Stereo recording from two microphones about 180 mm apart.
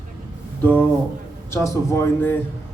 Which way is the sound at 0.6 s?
10° left (ahead or behind).